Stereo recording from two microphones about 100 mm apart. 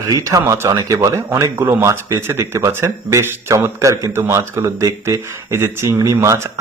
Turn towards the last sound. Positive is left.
turn(degrees=-25)  # may be behind; listen again after turning